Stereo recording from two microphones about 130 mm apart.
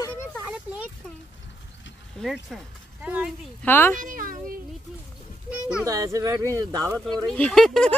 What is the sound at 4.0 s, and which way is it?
Speech, 90° right.